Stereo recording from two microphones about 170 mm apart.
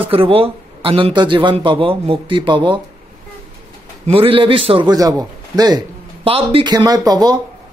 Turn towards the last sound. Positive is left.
turn(degrees=-20)  # may be behind; listen again after turning